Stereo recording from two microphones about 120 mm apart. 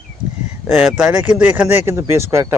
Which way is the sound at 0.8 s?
10° right (ahead or behind).